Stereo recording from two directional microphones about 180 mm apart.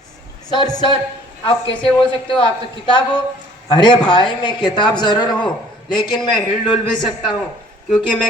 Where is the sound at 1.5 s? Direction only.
30° left (ahead or behind).